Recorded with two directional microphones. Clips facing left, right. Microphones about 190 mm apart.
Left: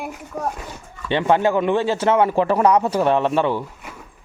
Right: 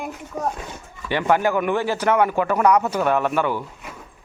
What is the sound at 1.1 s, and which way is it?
A man's voice, 25° left (ahead or behind).